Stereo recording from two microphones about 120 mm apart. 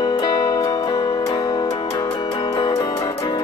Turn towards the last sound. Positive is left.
turn(degrees=30)  # may be behind; listen again after turning